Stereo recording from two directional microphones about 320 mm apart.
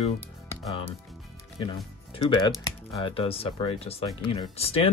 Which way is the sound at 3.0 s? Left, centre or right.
Centre.